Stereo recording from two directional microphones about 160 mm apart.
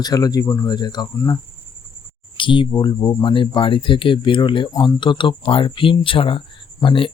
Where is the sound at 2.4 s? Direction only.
30° left (ahead or behind).